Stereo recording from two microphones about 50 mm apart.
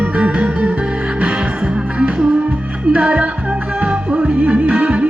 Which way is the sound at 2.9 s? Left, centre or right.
Right.